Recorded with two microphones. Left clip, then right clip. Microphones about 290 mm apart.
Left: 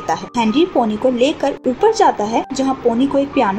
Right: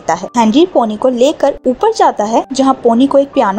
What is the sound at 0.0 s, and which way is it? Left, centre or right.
A woman's voice, right.